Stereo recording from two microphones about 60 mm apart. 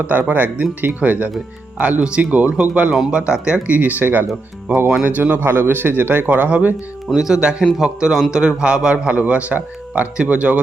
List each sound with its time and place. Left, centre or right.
0.0 s a man's voice: right; by 3.6 s centre
3.7 s a man's voice: right
7.1 s a man's voice: centre; by 10.6 s right